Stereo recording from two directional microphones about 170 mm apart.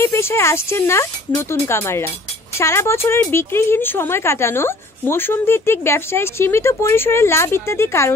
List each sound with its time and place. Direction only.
0.0 s speech: 15° left (ahead or behind)